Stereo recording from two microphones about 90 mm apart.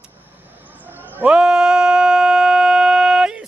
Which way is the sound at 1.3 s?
5° right (ahead or behind).